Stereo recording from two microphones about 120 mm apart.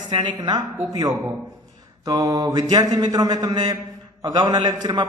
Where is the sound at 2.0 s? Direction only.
30° right (ahead or behind).